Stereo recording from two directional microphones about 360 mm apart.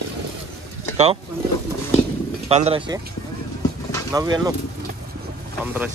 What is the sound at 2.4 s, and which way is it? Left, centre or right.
Speech, centre.